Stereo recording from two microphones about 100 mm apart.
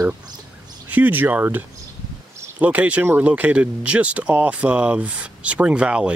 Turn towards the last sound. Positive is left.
turn(degrees=-10)  # may be behind; listen again after turning